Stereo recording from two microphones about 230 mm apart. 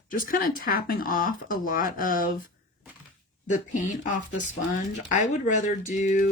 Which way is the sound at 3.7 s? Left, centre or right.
Left.